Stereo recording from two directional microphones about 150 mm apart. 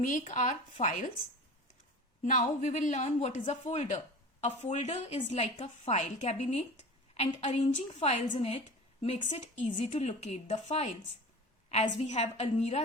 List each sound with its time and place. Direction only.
0.0 s speech: 60° left (ahead or behind)
2.2 s a woman's voice: 55° left (ahead or behind)